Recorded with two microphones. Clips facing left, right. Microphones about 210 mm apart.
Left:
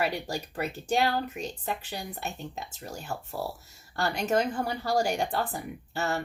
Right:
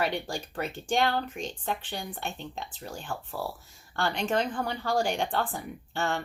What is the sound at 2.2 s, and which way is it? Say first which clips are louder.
Speech: even; 5° left (ahead or behind).